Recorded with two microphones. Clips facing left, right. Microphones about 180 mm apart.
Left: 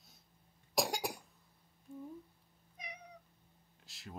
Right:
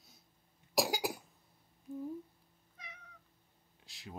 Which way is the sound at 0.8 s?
Centre (ahead or behind).